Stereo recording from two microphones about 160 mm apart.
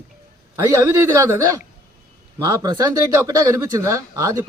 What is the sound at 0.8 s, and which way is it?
Speech, 20° right (ahead or behind).